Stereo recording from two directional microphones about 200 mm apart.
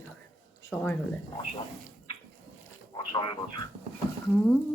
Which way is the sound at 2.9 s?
25° left (ahead or behind).